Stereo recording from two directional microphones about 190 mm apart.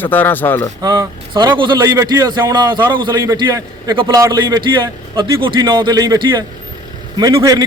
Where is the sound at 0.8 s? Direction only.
20° right (ahead or behind).